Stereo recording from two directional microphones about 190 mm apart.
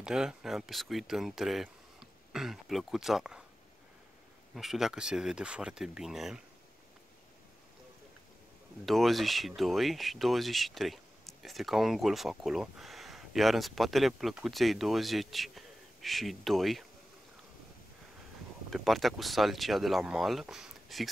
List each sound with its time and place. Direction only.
0.0 s speech: 5° right (ahead or behind)
4.6 s speech: centre (ahead or behind)
8.8 s speech: centre (ahead or behind)
18.7 s speech: centre (ahead or behind)